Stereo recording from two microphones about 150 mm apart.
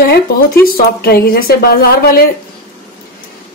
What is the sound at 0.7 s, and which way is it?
A woman's voice, 90° left.